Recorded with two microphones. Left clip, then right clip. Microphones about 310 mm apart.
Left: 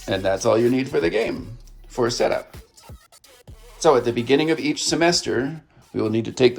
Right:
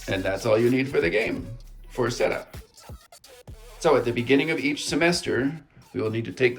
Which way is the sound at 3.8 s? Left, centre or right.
Centre.